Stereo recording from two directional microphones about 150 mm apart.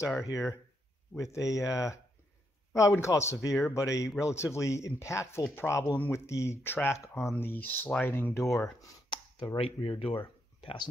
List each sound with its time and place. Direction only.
0.3 s speech: 20° left (ahead or behind)
9.1 s a sound: 30° left (ahead or behind)
9.7 s speech: 40° left (ahead or behind)